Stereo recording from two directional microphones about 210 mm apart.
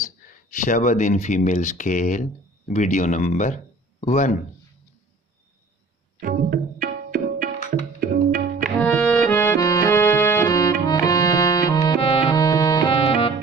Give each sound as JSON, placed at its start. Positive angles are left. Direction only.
{"t": 0.6, "sound": "speech", "side_deg": 35}
{"t": 6.1, "sound": "music", "side_deg": -45}
{"t": 8.6, "sound": "music", "side_deg": 5}